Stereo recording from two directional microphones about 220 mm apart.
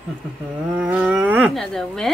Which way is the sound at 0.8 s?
5° right (ahead or behind).